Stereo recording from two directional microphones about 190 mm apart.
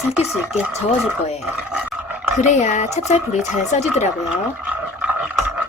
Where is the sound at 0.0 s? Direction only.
Centre (ahead or behind).